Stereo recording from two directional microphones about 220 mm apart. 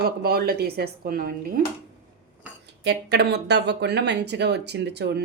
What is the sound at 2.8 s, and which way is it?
Speech, 50° right (ahead or behind).